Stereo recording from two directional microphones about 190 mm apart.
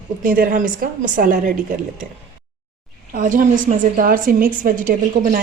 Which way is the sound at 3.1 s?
45° right (ahead or behind).